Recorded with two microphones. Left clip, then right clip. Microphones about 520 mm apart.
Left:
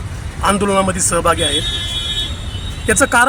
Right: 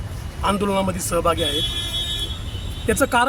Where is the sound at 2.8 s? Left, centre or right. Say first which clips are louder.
Left 6 dB; right.